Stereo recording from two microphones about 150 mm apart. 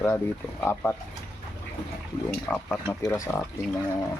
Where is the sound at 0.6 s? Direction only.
10° left (ahead or behind).